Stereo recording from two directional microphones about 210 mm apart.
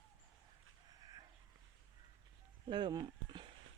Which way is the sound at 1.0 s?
20° right (ahead or behind).